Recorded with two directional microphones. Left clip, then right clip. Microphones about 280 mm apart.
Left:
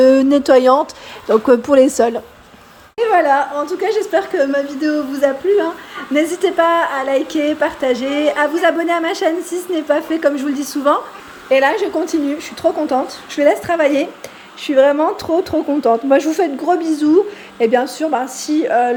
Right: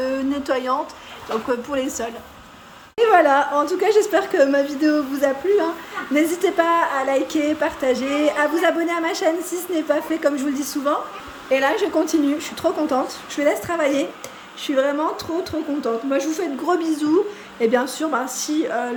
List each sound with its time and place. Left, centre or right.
0.0 s speech: left
1.7 s a woman's voice: centre
3.0 s speech: centre